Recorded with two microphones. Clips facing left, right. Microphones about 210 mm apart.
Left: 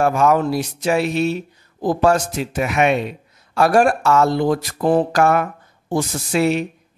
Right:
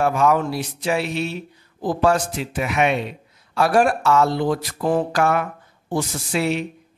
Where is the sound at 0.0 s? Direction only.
45° left (ahead or behind).